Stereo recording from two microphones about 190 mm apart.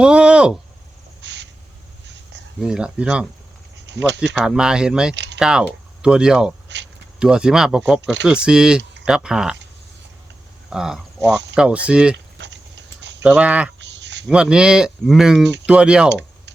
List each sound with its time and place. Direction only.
0.0 s speech: 5° right (ahead or behind)
1.2 s owl: 65° right (ahead or behind)
2.6 s speech: 5° right (ahead or behind)
3.8 s speech: 65° right (ahead or behind)
4.4 s speech: 5° right (ahead or behind)
5.1 s typing: 65° right (ahead or behind)
5.4 s speech: 5° right (ahead or behind)
6.7 s a sound: 65° right (ahead or behind)
7.2 s speech: 5° right (ahead or behind)
10.7 s speech: 5° right (ahead or behind)
12.1 s a sound: 70° right (ahead or behind)
13.2 s speech: 5° right (ahead or behind)
13.7 s a sound: 65° right (ahead or behind)
14.3 s speech: 5° right (ahead or behind)